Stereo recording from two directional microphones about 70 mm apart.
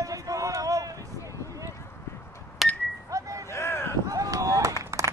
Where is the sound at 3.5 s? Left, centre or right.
Left.